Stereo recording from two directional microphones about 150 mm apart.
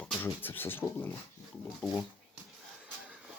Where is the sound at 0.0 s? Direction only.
5° left (ahead or behind).